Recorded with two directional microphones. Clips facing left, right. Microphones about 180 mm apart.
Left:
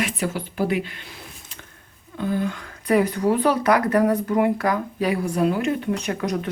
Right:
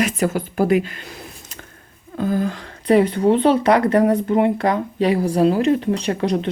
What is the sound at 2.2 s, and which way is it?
Speech, 40° right (ahead or behind).